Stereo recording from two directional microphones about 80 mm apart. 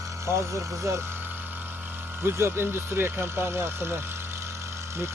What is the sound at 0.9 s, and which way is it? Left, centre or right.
Speech, right.